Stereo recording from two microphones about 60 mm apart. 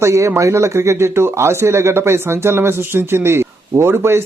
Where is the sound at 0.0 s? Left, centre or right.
Right.